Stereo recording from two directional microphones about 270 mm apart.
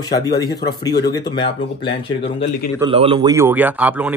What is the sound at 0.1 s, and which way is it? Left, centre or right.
Speech, centre.